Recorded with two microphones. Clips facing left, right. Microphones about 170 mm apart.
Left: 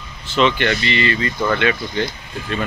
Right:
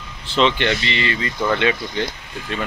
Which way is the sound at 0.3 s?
25° right (ahead or behind).